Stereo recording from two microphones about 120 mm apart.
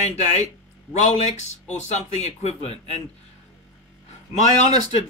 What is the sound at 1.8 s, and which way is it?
Speech, 70° left (ahead or behind).